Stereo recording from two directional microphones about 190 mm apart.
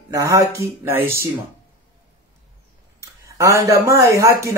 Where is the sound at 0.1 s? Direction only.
15° right (ahead or behind).